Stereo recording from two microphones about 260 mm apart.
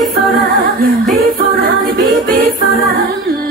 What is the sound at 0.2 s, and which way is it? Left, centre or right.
Music, right.